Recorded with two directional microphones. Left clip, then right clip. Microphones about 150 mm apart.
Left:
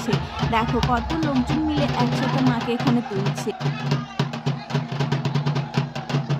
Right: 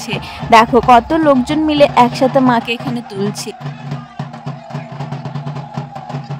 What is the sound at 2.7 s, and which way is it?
Speech, 50° right (ahead or behind).